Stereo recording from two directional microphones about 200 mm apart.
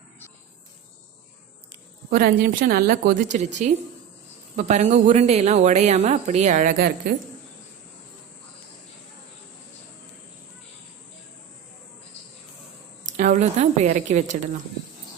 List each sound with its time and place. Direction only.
2.0 s a woman's voice: 45° right (ahead or behind)
13.1 s speech: 40° right (ahead or behind)